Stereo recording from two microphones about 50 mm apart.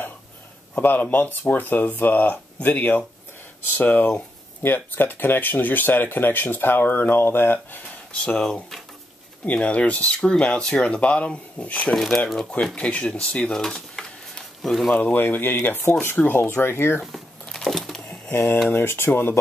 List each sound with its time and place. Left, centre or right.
0.7 s speech: left
9.4 s speech: left
11.9 s speech: centre
12.7 s speech: centre
13.5 s a sound: centre
15.1 s speech: left
16.2 s speech: left
16.5 s speech: left
17.0 s crumpling: centre
17.6 s typing: centre
18.3 s speech: left